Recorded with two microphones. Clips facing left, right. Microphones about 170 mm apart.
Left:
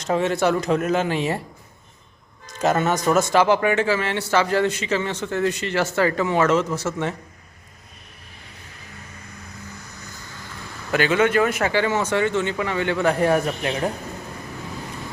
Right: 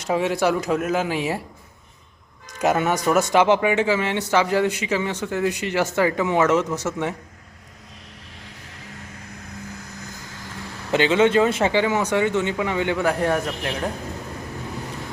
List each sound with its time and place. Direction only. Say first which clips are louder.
0.0 s speech: even; 10° right (ahead or behind)
2.5 s speech: even; 15° right (ahead or behind)
10.9 s speech: right 2 dB; 20° right (ahead or behind)
13.1 s a man's voice: left 2 dB; 5° left (ahead or behind)